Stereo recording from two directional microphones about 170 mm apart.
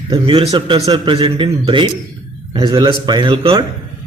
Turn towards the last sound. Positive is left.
turn(degrees=-25)  # may be behind; listen again after turning